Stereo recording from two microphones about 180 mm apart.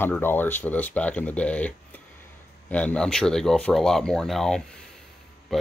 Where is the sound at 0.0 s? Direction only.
10° left (ahead or behind).